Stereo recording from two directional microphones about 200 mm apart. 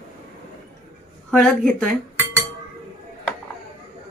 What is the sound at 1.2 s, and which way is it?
Speech, 5° left (ahead or behind).